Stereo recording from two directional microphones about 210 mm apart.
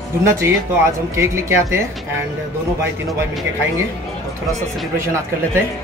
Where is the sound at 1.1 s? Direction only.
15° right (ahead or behind).